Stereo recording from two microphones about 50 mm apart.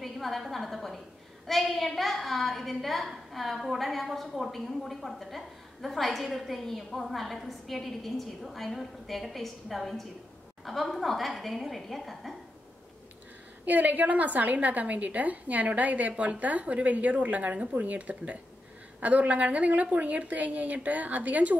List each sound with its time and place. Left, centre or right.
0.0 s a woman's voice: centre
13.7 s a woman's voice: right